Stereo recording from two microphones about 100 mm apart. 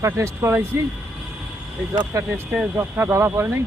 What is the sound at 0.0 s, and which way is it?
Speech, 25° right (ahead or behind).